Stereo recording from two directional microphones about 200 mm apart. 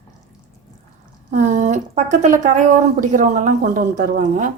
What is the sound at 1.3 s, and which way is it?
Speech, 35° right (ahead or behind).